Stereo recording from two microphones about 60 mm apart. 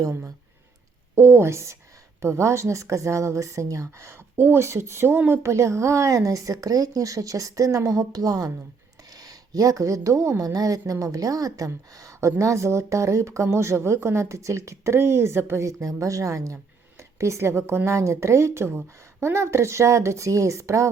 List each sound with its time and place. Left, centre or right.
1.1 s a woman's voice: right
5.4 s speech: right
7.9 s a woman's voice: right
14.9 s a woman's voice: right